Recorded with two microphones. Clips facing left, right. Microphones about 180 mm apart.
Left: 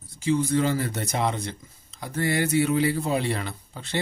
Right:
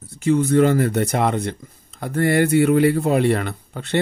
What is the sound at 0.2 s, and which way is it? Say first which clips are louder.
Speech: right 7 dB; 60° right (ahead or behind).